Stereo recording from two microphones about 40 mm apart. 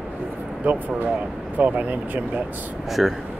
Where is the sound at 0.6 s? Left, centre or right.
Right.